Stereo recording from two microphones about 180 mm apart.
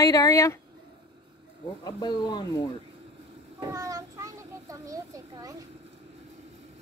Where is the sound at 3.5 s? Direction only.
20° right (ahead or behind).